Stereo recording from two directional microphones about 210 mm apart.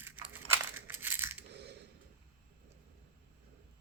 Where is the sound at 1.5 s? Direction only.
50° right (ahead or behind).